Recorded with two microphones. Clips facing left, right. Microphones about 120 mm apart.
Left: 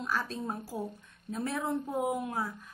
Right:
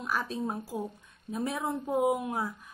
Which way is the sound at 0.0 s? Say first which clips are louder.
Right 2 dB; 15° right (ahead or behind).